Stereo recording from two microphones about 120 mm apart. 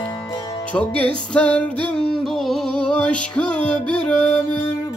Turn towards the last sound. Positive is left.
turn(degrees=5)  # may be behind; listen again after turning